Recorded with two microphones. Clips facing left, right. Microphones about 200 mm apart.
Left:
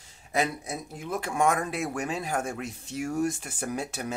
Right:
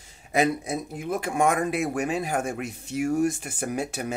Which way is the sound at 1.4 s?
15° right (ahead or behind).